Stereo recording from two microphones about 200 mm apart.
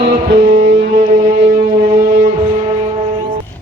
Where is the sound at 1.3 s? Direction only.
35° right (ahead or behind).